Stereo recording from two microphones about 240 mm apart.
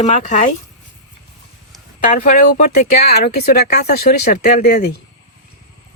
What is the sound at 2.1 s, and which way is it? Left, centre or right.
Speech, left.